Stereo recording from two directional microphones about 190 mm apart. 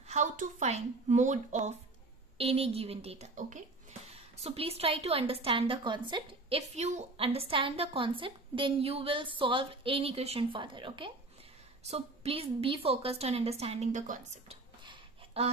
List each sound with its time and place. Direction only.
0.1 s a woman's voice: 40° right (ahead or behind); by 6.6 s 25° right (ahead or behind)
6.7 s a woman's voice: 35° right (ahead or behind)
14.9 s a sound: 30° right (ahead or behind)